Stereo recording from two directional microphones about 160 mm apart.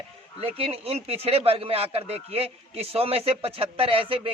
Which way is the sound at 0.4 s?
35° right (ahead or behind).